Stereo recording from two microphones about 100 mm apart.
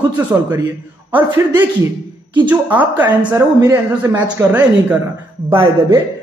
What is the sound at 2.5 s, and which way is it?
A man's voice, 15° right (ahead or behind).